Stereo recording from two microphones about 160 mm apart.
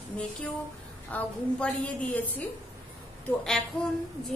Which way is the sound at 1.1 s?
10° left (ahead or behind).